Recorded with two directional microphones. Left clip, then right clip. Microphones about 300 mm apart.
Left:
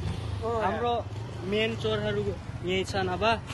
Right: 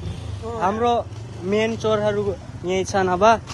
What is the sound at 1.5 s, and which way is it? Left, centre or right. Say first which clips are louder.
Speech: right 8 dB; centre.